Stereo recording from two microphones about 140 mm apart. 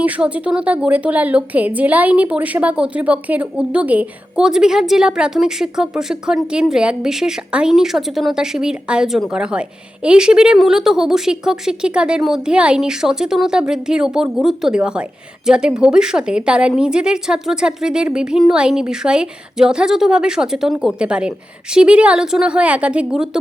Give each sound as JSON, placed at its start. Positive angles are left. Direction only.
{"t": 0.0, "sound": "a woman's voice", "side_deg": -10}